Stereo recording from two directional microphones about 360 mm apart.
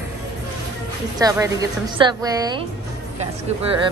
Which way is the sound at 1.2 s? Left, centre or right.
Centre.